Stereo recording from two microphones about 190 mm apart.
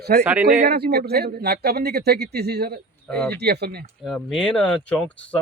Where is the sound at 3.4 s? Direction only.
60° right (ahead or behind).